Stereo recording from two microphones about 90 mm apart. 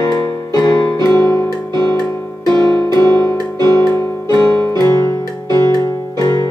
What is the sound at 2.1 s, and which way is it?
Music, 25° left (ahead or behind).